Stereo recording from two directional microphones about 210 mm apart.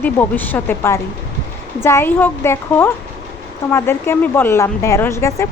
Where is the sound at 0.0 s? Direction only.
10° left (ahead or behind).